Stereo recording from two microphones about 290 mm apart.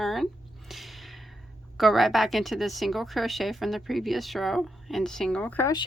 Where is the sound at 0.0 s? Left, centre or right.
Centre.